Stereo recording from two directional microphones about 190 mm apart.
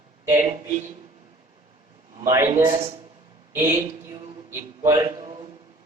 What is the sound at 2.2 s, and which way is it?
Speech, 15° right (ahead or behind).